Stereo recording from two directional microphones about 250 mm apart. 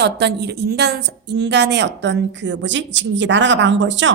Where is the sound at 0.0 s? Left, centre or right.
Right.